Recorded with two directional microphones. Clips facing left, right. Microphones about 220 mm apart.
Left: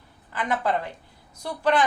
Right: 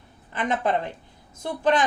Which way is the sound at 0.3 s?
20° right (ahead or behind).